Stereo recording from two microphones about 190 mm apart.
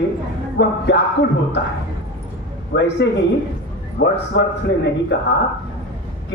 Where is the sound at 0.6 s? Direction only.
70° left (ahead or behind).